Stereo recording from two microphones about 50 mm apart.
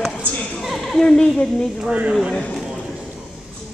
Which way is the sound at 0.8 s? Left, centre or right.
Centre.